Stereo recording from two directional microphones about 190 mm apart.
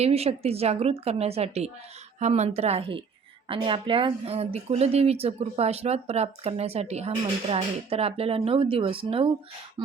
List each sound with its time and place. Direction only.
0.0 s speech: 35° right (ahead or behind)